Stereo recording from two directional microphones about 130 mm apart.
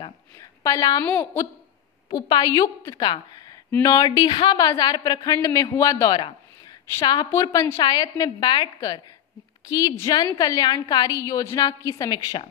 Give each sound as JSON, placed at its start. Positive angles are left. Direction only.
{"t": 0.4, "sound": "a woman's voice", "side_deg": 25}
{"t": 1.0, "sound": "a woman's voice", "side_deg": 15}
{"t": 2.0, "sound": "a woman's voice", "side_deg": 35}